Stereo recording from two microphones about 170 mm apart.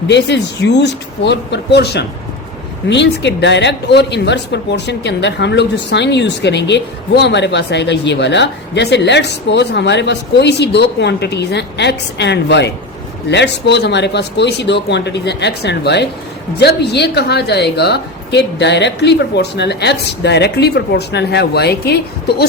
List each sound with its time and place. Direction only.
0.1 s a woman's voice: 90° left
2.9 s a woman's voice: 90° left; by 22.4 s 70° left (ahead or behind)